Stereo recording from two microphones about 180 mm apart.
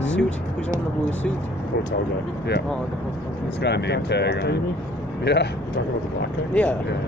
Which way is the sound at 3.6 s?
70° left (ahead or behind).